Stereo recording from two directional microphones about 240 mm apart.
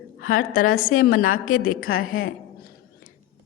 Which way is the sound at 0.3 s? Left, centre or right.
Left.